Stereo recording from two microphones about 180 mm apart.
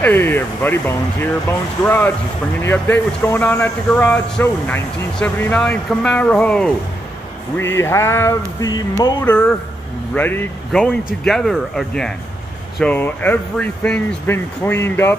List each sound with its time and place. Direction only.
0.0 s speech: 10° left (ahead or behind)
9.2 s speech: 10° left (ahead or behind)